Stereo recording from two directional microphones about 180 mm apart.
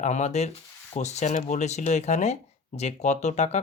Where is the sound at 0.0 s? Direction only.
40° left (ahead or behind).